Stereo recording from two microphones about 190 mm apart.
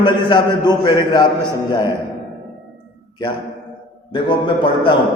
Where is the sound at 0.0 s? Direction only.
25° left (ahead or behind).